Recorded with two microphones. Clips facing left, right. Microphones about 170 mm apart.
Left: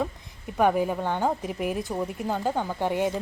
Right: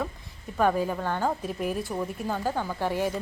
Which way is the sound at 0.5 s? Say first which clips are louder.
Left 2 dB; 15° left (ahead or behind).